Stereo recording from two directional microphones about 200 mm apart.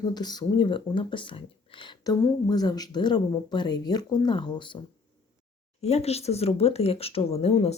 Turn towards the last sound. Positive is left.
turn(degrees=30)  # may be behind; listen again after turning